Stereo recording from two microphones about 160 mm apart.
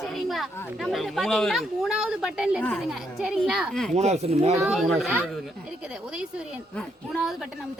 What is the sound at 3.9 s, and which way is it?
Speech, 45° right (ahead or behind).